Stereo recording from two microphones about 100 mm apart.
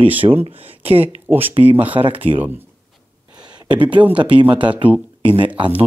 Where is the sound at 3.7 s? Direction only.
55° right (ahead or behind).